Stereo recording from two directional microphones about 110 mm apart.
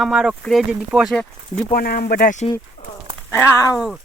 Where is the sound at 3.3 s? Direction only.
20° left (ahead or behind).